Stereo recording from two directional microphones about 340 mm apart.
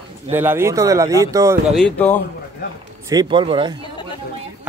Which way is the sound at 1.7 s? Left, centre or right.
Centre.